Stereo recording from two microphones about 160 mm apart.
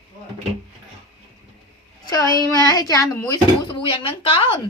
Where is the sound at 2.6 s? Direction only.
20° left (ahead or behind).